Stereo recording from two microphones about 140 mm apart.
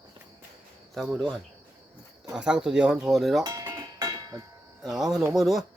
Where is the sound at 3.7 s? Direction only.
25° right (ahead or behind).